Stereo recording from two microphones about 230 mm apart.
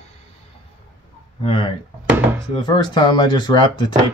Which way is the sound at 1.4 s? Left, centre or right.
Left.